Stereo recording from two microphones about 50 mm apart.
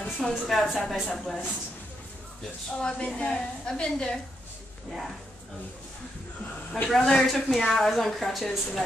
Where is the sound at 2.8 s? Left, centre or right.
Left.